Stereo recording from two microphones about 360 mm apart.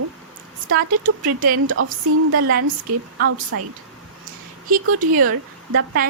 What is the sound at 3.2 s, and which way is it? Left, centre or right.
Speech, right.